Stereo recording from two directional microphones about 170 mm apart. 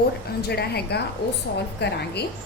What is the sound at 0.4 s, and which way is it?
A woman's voice, 70° left (ahead or behind).